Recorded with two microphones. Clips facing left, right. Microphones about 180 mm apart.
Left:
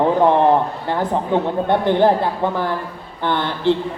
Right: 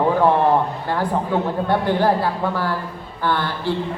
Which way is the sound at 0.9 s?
20° left (ahead or behind).